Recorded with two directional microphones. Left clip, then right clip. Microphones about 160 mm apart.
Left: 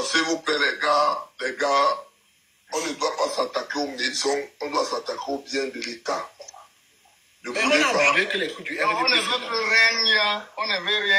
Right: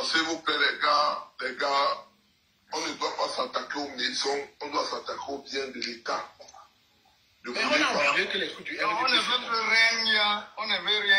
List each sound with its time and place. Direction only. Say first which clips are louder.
0.0 s speech: left 4 dB; 50° left (ahead or behind)